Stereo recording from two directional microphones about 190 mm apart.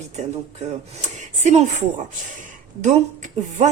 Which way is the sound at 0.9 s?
40° right (ahead or behind).